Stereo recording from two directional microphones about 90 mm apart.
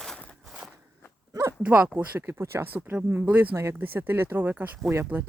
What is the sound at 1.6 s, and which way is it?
Speech, 15° right (ahead or behind).